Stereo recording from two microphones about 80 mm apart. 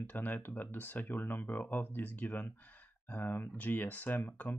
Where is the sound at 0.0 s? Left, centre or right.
Left.